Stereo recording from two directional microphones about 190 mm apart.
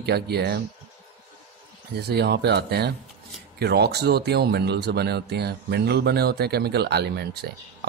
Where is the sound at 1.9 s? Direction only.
60° right (ahead or behind).